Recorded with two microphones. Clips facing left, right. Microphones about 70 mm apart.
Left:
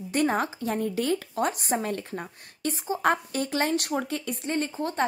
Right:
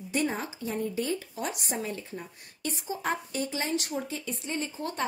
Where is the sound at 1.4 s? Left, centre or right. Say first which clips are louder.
Left 6 dB; left.